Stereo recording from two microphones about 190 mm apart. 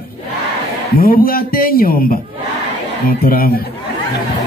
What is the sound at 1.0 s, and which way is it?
A man's voice, 50° left (ahead or behind).